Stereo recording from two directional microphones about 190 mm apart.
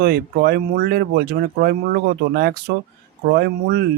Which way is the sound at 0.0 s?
55° right (ahead or behind).